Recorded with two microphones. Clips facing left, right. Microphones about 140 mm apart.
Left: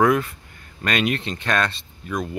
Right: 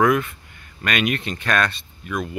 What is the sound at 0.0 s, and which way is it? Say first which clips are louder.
Speech: even; 30° left (ahead or behind).